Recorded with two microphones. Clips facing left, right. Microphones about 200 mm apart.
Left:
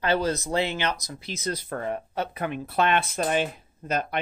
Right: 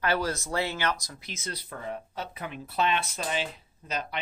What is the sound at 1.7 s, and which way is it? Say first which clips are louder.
Speech: left 7 dB; 65° left (ahead or behind).